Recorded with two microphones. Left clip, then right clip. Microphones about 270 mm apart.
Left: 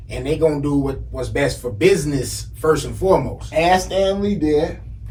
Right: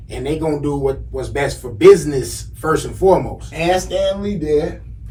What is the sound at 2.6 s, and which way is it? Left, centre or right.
Speech, centre.